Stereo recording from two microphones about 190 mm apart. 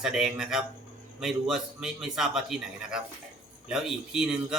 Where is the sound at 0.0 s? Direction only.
5° right (ahead or behind).